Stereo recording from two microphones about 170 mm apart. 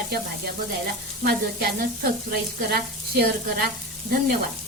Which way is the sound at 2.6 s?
70° right (ahead or behind).